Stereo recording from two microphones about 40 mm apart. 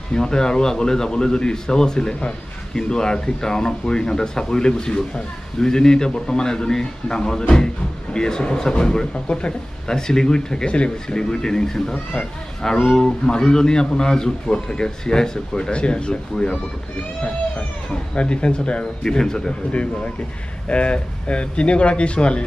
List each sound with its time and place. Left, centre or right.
0.1 s speech: centre
19.1 s speech: centre
19.7 s speech: left